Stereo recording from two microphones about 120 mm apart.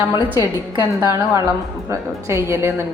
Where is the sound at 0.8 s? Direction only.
25° right (ahead or behind).